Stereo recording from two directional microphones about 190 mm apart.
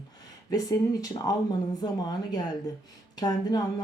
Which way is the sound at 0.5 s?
20° left (ahead or behind).